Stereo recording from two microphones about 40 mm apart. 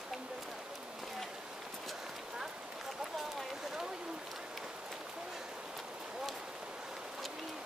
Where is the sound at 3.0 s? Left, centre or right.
Centre.